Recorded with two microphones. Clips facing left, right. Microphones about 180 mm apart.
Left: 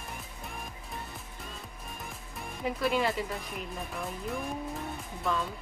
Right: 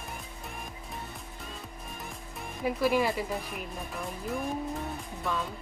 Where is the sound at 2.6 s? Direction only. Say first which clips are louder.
Right 3 dB; 5° right (ahead or behind).